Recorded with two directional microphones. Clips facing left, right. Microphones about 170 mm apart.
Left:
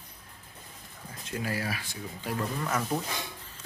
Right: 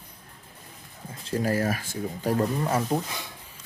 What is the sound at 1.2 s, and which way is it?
Speech, 40° right (ahead or behind).